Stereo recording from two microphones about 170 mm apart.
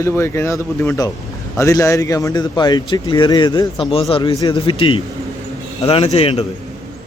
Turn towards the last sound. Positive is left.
turn(degrees=35)  # may be behind; listen again after turning